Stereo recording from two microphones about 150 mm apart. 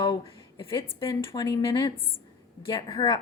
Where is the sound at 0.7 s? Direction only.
35° left (ahead or behind).